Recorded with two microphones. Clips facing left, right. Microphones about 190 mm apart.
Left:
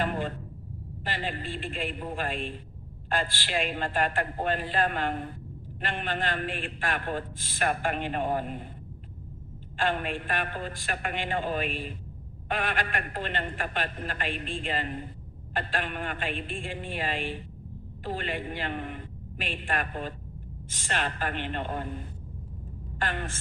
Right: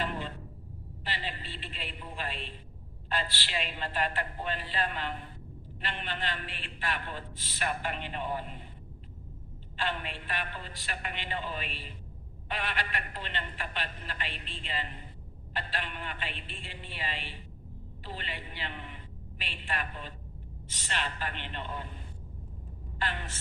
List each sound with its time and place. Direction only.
0.0 s a sound: 50° left (ahead or behind)
1.0 s a man's voice: 50° left (ahead or behind)
9.7 s a man's voice: 50° left (ahead or behind)
23.0 s a man's voice: 50° left (ahead or behind)